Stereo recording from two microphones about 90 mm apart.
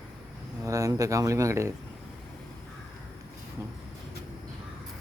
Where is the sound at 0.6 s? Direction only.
40° right (ahead or behind).